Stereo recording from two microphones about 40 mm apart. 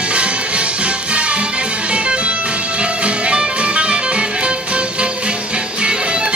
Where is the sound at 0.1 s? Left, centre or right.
Right.